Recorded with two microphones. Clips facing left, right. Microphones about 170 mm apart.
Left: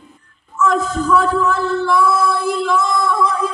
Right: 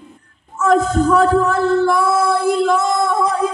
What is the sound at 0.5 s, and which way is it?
Music, 50° right (ahead or behind).